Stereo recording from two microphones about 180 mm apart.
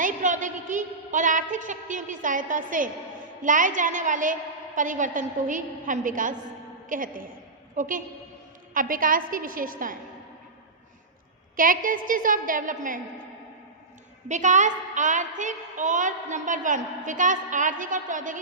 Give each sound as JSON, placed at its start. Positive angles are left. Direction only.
{"t": 0.0, "sound": "a woman's voice", "side_deg": -45}
{"t": 11.5, "sound": "a woman's voice", "side_deg": -50}
{"t": 14.3, "sound": "a woman's voice", "side_deg": -40}